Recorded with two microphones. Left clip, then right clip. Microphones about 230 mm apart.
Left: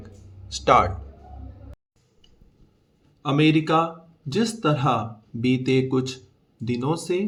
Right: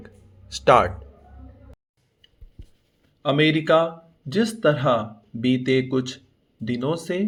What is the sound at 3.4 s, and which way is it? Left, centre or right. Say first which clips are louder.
Speech: right 1 dB; centre.